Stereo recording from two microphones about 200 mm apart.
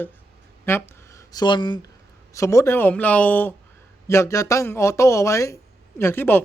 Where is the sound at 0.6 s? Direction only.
15° left (ahead or behind).